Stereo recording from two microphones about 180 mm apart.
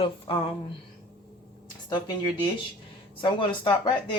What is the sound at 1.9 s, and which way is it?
Speech, 25° left (ahead or behind).